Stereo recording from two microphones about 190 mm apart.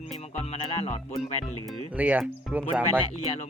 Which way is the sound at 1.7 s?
10° right (ahead or behind).